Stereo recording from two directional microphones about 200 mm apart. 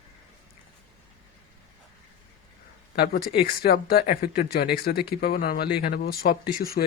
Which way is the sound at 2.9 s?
50° left (ahead or behind).